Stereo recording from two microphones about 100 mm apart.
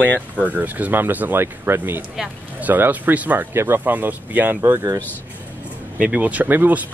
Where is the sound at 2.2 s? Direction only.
5° right (ahead or behind).